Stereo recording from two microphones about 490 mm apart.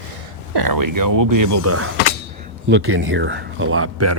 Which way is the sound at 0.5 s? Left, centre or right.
Right.